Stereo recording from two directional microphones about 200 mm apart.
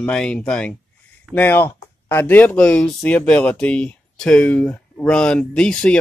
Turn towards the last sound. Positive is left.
turn(degrees=5)  # may be behind; listen again after turning